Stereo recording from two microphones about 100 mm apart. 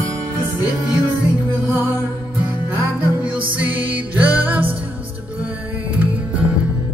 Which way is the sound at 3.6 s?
15° right (ahead or behind).